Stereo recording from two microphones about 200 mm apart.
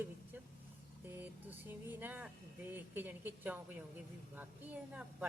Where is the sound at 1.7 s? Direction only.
10° right (ahead or behind).